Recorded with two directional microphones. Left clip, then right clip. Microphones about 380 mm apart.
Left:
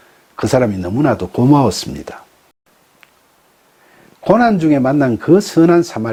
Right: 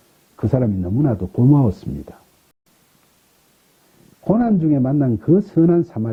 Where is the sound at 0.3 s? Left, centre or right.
Centre.